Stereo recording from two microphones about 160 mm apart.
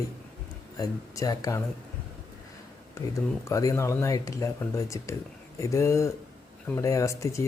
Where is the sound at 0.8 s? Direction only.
20° left (ahead or behind).